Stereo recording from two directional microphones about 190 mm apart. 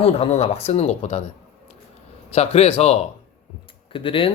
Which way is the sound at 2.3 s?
35° left (ahead or behind).